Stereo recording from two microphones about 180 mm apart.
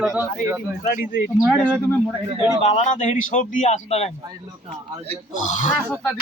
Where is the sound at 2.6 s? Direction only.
40° left (ahead or behind).